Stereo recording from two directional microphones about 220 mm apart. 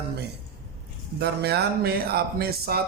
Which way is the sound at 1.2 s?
45° right (ahead or behind).